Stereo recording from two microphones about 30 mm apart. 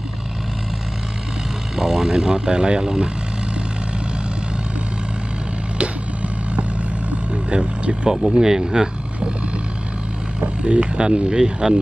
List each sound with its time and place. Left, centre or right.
1.8 s speech: centre
5.8 s vehicle: right
8.1 s speech: right
10.6 s speech: right